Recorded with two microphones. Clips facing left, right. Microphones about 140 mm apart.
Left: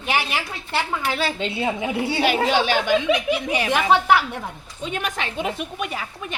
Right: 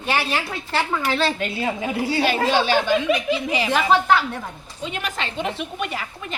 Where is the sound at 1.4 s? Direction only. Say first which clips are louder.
Left 1 dB; 25° left (ahead or behind).